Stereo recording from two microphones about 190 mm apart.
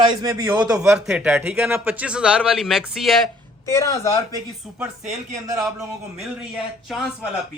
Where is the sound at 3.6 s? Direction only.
15° left (ahead or behind).